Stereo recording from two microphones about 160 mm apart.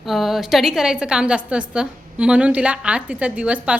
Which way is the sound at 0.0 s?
Centre (ahead or behind).